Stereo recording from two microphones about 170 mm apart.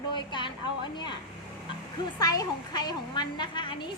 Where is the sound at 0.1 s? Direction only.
25° left (ahead or behind).